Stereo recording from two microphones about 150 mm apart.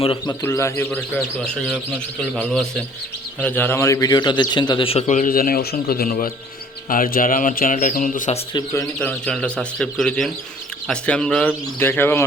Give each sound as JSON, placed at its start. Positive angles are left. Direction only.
{"t": 0.0, "sound": "a man's voice", "side_deg": 35}
{"t": 0.4, "sound": "a man's voice", "side_deg": 15}
{"t": 5.3, "sound": "a man's voice", "side_deg": 75}
{"t": 8.5, "sound": "a man's voice", "side_deg": 20}
{"t": 9.0, "sound": "speech", "side_deg": 10}